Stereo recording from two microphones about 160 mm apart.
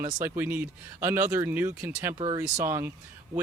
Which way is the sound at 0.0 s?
15° right (ahead or behind).